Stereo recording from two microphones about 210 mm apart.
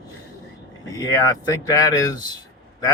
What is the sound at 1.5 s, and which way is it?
Speech, 15° left (ahead or behind).